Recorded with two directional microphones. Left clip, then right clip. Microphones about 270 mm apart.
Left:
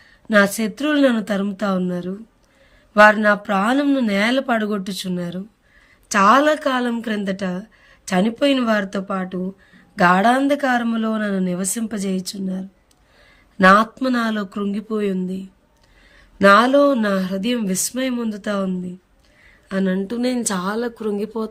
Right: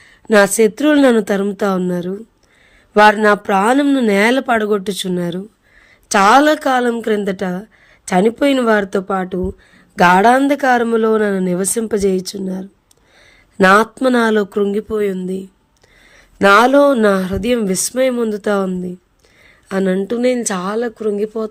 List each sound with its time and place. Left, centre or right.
0.0 s a woman's voice: centre